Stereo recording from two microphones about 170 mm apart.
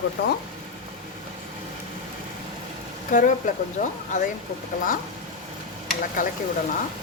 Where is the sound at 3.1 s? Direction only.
50° left (ahead or behind).